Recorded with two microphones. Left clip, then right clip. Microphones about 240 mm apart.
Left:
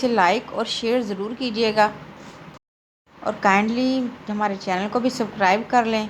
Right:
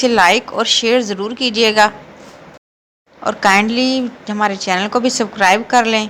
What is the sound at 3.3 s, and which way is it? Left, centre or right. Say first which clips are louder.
A woman's voice: right 6 dB; centre.